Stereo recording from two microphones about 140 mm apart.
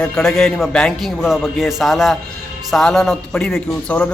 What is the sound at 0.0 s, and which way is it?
A man's voice, 5° left (ahead or behind).